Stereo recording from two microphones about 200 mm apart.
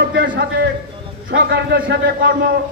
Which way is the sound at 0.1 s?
55° right (ahead or behind).